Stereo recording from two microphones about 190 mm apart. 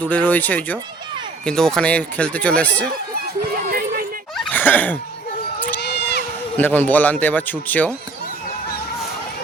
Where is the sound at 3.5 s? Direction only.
50° right (ahead or behind).